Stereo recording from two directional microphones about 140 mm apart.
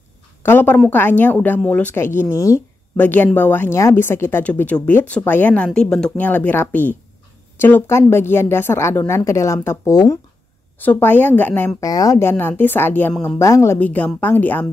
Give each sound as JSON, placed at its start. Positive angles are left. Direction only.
{"t": 0.4, "sound": "speech", "side_deg": 15}
{"t": 11.8, "sound": "speech", "side_deg": 25}